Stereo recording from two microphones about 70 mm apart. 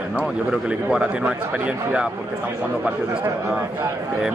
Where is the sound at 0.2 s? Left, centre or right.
Centre.